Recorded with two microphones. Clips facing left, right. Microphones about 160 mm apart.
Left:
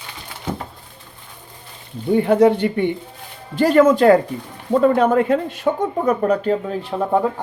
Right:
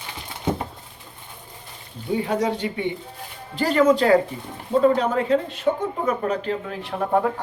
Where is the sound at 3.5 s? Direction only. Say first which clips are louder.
Left 5 dB; 45° left (ahead or behind).